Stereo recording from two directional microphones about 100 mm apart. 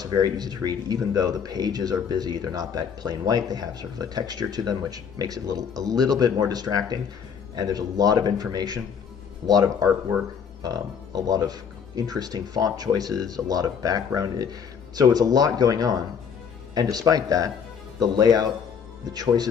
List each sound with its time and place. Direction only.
0.0 s speech: 40° right (ahead or behind)